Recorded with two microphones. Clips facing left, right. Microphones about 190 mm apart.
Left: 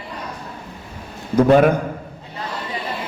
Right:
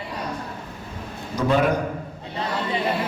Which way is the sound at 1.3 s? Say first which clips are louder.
Left 8 dB; 55° left (ahead or behind).